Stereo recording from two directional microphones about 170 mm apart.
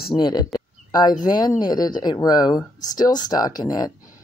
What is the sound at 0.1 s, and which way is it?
Speech, 25° left (ahead or behind).